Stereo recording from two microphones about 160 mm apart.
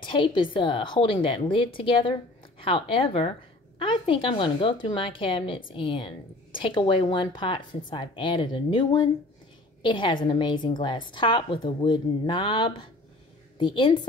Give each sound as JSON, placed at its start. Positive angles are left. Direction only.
{"t": 0.0, "sound": "a woman's voice", "side_deg": 30}